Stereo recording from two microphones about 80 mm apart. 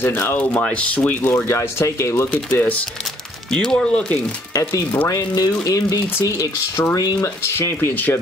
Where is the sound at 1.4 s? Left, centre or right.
Left.